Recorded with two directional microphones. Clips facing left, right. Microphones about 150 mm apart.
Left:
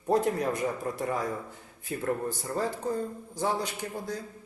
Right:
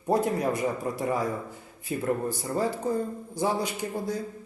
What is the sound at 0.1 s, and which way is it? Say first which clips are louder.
Speech: right 1 dB; 5° right (ahead or behind).